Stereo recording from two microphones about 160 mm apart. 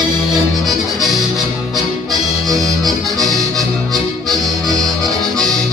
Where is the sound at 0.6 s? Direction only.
Centre (ahead or behind).